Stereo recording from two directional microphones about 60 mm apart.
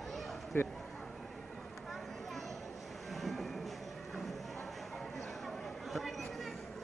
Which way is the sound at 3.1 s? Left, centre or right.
Centre.